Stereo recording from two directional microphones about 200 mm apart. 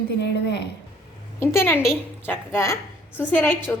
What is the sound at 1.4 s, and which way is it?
A woman's voice, 10° left (ahead or behind).